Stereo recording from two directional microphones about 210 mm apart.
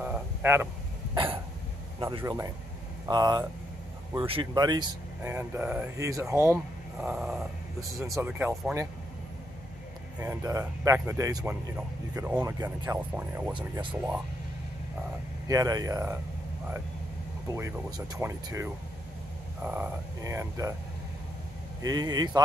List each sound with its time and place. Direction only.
0.0 s vehicle: 5° right (ahead or behind)
1.1 s cough: 25° right (ahead or behind)
2.0 s speech: 15° right (ahead or behind)
5.2 s speech: 10° right (ahead or behind)
10.1 s speech: 10° right (ahead or behind)
15.4 s speech: 15° right (ahead or behind)
17.5 s speech: 15° right (ahead or behind)
21.8 s speech: 20° right (ahead or behind)